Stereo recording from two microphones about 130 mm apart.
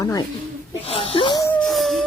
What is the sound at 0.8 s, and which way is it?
Wheeze, 50° left (ahead or behind).